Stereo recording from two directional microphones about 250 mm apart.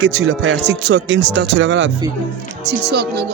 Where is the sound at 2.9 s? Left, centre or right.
Right.